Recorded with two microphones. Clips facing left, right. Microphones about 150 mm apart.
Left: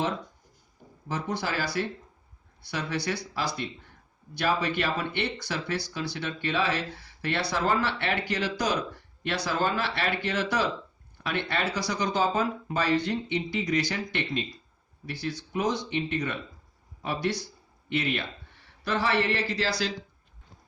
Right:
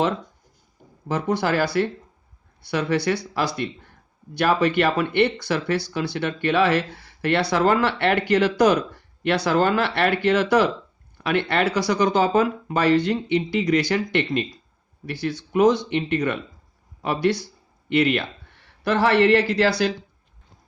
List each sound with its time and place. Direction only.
1.0 s speech: 65° right (ahead or behind)